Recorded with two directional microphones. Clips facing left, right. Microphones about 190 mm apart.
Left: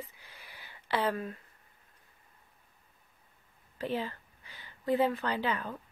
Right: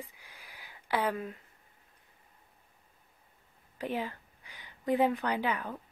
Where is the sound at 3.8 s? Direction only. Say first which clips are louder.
Left 1 dB; 15° right (ahead or behind).